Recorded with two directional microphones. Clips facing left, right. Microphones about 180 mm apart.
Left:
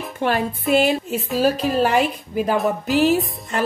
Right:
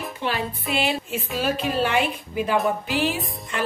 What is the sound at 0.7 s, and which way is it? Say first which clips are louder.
A woman's voice: left 7 dB; 40° left (ahead or behind).